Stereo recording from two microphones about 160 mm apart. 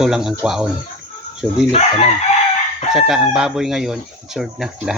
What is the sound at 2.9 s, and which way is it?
Speech, 5° right (ahead or behind).